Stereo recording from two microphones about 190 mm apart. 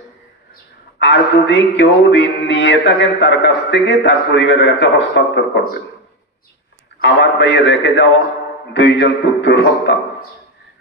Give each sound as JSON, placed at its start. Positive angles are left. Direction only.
{"t": 0.9, "sound": "music", "side_deg": 65}
{"t": 7.0, "sound": "music", "side_deg": 65}